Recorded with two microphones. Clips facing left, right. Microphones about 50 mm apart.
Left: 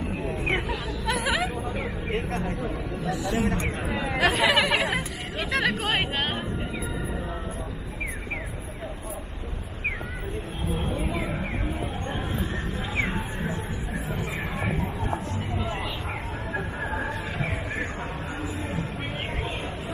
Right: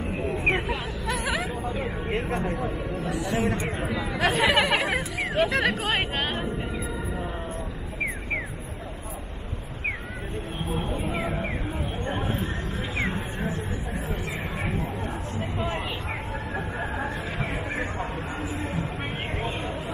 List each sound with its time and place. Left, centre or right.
0.4 s vehicle: centre
1.8 s speech: centre
11.1 s a sound: right
16.5 s music: centre